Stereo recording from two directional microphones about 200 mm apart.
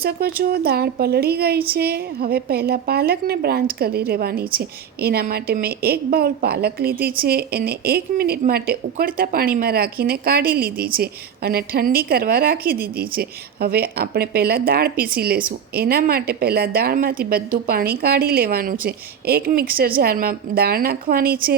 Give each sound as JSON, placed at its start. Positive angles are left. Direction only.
{"t": 0.0, "sound": "a woman's voice", "side_deg": -50}